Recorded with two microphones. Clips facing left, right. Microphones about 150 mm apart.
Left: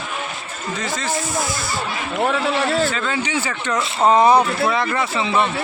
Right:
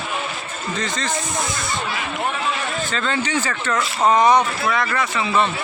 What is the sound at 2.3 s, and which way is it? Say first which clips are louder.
Speech: left 7 dB; 80° left.